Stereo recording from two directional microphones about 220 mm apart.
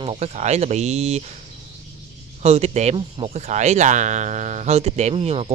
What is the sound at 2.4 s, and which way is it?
Speech, 30° right (ahead or behind).